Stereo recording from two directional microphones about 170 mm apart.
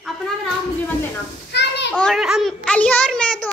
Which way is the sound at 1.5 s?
85° left.